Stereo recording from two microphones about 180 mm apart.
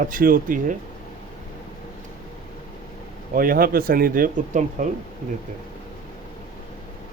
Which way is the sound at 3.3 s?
50° right (ahead or behind).